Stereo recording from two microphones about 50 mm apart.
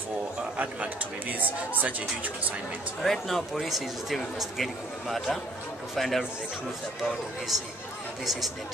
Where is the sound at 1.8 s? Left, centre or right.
Right.